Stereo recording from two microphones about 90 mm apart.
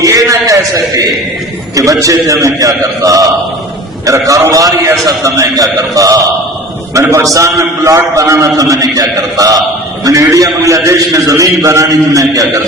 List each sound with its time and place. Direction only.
0.0 s a man's voice: 40° right (ahead or behind)